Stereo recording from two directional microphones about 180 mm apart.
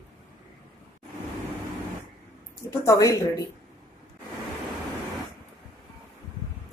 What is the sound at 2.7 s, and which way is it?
Speech, 20° left (ahead or behind).